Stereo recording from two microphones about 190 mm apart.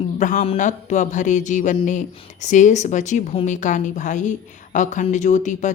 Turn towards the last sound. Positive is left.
turn(degrees=40)  # may be behind; listen again after turning